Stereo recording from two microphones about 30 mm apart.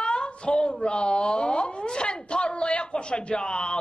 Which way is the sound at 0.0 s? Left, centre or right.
Left.